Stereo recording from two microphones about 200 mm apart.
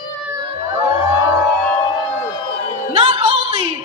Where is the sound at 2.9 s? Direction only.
30° right (ahead or behind).